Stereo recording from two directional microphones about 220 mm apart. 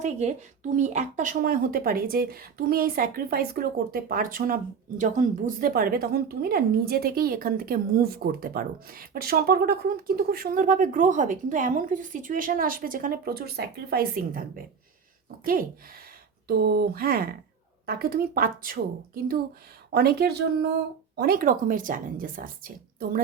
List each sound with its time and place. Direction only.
0.0 s speech: 30° right (ahead or behind)
16.5 s a woman's voice: 45° right (ahead or behind)